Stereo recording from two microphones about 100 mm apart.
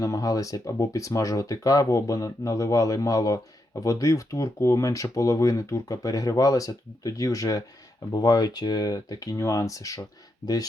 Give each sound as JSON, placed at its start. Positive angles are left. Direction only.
{"t": 0.0, "sound": "speech", "side_deg": 35}